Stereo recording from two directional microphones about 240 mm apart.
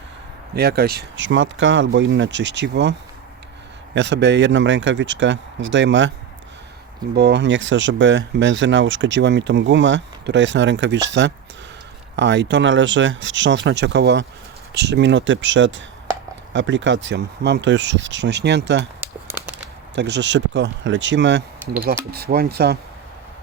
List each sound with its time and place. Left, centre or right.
0.5 s speech: right
3.9 s speech: right
7.2 s speech: right
12.1 s speech: right
18.9 s a sound: centre
20.0 s speech: right